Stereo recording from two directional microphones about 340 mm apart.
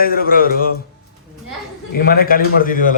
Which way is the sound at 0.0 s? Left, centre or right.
Left.